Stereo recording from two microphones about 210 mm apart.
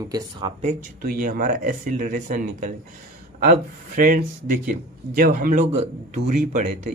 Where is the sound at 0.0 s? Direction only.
20° right (ahead or behind); by 5.6 s 45° right (ahead or behind).